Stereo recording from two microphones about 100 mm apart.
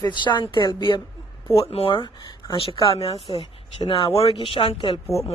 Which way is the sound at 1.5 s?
70° left (ahead or behind).